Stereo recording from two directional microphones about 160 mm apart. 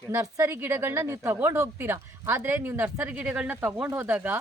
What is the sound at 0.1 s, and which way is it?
A woman's voice, 15° right (ahead or behind).